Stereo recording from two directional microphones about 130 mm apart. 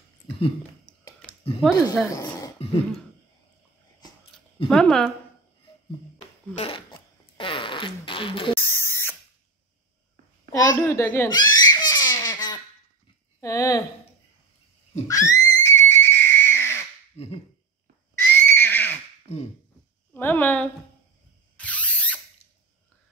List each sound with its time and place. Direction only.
1.7 s speech: 25° left (ahead or behind)
2.0 s a sound: 25° left (ahead or behind)
4.3 s a sound: 5° left (ahead or behind)
4.6 s speech: 5° left (ahead or behind)
6.1 s zipper: 50° left (ahead or behind)
8.5 s a sound: 20° left (ahead or behind)
10.5 s a child's voice: 25° left (ahead or behind)
11.2 s baby laughter: 35° left (ahead or behind)
13.4 s speech: 25° left (ahead or behind)
15.0 s neigh: 25° left (ahead or behind)
18.3 s neigh: 15° left (ahead or behind)
20.2 s a woman's voice: 15° left (ahead or behind)
21.5 s mechanisms: 10° left (ahead or behind)